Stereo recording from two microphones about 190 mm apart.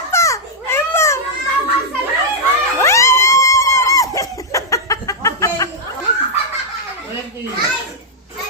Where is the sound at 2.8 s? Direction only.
15° left (ahead or behind).